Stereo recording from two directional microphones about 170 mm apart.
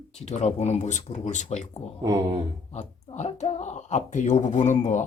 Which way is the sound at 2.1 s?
20° right (ahead or behind).